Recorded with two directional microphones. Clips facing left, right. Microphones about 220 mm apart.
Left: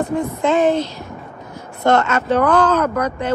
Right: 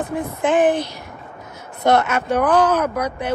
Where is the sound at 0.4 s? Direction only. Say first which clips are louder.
Even; 15° right (ahead or behind).